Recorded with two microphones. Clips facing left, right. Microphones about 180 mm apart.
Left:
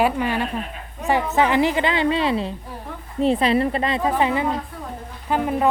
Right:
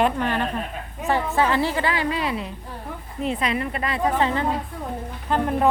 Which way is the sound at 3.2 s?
30° left (ahead or behind).